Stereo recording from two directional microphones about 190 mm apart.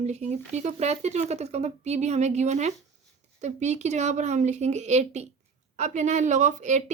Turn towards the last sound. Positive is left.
turn(degrees=-40)  # may be behind; listen again after turning